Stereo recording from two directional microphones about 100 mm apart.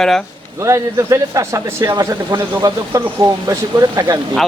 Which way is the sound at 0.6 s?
30° right (ahead or behind).